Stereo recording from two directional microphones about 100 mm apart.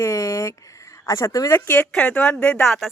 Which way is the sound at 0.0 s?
30° left (ahead or behind).